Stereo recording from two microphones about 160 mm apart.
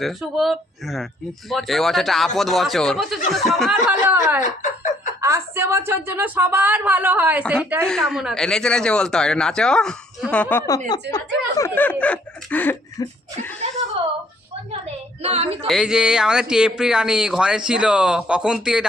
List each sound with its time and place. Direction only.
0.0 s a man's voice: centre (ahead or behind)
3.8 s a woman's voice: 10° right (ahead or behind)
4.4 s speech: 50° left (ahead or behind)
5.2 s a woman's voice: 15° right (ahead or behind)
7.9 s a man's voice: 5° left (ahead or behind)
10.7 s speech: 25° left (ahead or behind); by 12.7 s 10° left (ahead or behind)
13.0 s speech: 25° left (ahead or behind)
15.2 s a woman's voice: 40° right (ahead or behind)
15.6 s a man's voice: centre (ahead or behind)